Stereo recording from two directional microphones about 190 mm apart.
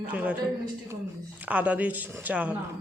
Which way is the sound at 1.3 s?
5° right (ahead or behind).